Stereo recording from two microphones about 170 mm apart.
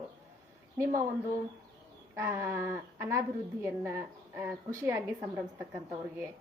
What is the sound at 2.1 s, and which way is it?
A woman's voice, 15° right (ahead or behind).